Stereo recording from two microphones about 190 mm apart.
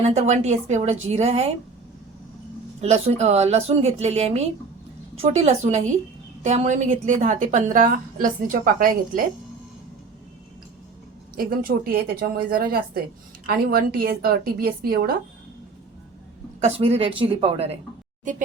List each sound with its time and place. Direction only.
0.1 s a woman's voice: 35° right (ahead or behind)
2.8 s a woman's voice: 35° right (ahead or behind)
11.3 s a woman's voice: 50° right (ahead or behind)
16.6 s a woman's voice: 35° right (ahead or behind)